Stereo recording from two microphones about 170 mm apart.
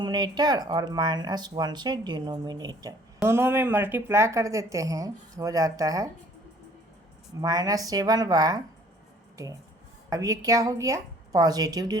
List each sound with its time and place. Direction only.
0.0 s speech: 25° right (ahead or behind)
3.2 s speech: 15° right (ahead or behind)
7.4 s speech: 20° right (ahead or behind)
10.1 s speech: 20° right (ahead or behind)